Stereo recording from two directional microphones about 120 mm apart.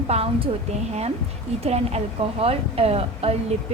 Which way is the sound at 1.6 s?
60° right (ahead or behind).